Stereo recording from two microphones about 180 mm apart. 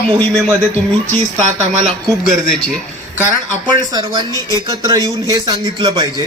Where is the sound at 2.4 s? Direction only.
5° left (ahead or behind).